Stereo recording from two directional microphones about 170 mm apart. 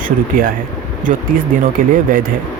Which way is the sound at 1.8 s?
55° right (ahead or behind).